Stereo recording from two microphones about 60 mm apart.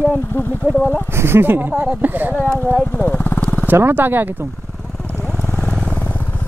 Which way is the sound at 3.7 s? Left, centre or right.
Right.